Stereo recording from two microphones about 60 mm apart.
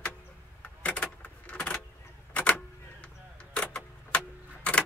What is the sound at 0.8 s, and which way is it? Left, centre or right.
Vehicle, left.